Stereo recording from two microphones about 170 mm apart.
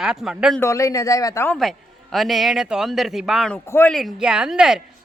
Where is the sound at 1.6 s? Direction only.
Centre (ahead or behind).